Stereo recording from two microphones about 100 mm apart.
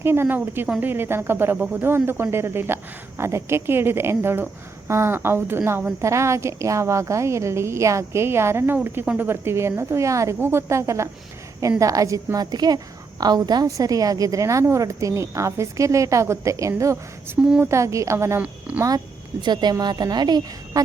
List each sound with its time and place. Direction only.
0.0 s a woman's voice: 25° right (ahead or behind); by 20.8 s 45° right (ahead or behind)